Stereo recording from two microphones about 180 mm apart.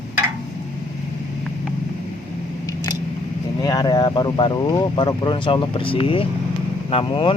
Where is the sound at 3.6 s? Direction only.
20° left (ahead or behind).